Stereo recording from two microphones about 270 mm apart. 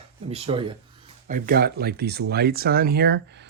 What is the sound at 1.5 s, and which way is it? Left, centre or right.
Speech, right.